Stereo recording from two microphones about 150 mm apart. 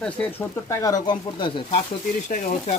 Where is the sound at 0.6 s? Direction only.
25° left (ahead or behind).